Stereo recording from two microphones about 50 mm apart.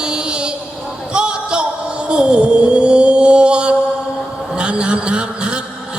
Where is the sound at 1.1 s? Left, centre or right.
Centre.